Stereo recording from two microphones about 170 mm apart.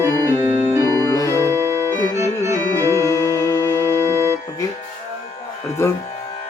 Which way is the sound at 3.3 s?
20° left (ahead or behind).